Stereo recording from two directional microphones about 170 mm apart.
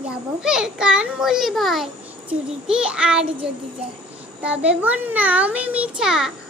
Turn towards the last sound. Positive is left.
turn(degrees=-5)  # may be behind; listen again after turning